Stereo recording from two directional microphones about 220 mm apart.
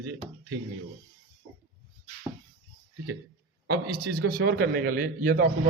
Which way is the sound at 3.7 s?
45° right (ahead or behind).